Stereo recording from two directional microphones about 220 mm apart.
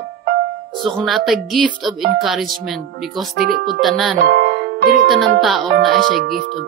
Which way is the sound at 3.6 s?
Centre (ahead or behind).